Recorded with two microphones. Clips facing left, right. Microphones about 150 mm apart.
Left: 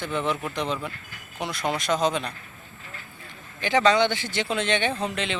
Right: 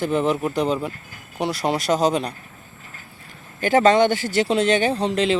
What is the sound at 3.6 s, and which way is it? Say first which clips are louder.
Speech: right 5 dB; 45° right (ahead or behind).